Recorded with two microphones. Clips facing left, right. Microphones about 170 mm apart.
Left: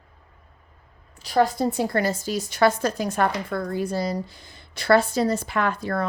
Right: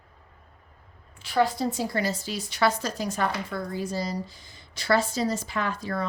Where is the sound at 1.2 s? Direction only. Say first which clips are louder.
Left 3 dB; 45° left (ahead or behind).